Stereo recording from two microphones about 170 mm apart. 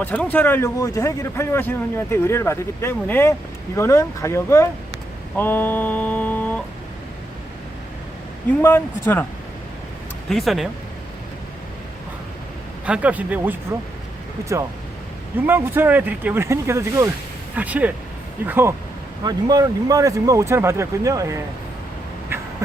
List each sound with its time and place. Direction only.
0.0 s a man's voice: 10° left (ahead or behind)
5.4 s mantra: 10° left (ahead or behind)
8.6 s a man's voice: 15° left (ahead or behind)
10.2 s speech: centre (ahead or behind)
12.8 s speech: 10° right (ahead or behind)
15.4 s speech: 10° right (ahead or behind)
19.2 s speech: 25° right (ahead or behind)
22.3 s duck: 15° right (ahead or behind)